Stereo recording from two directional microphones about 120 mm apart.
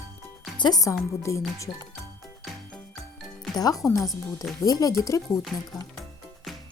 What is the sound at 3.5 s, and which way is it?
Speech, 30° left (ahead or behind).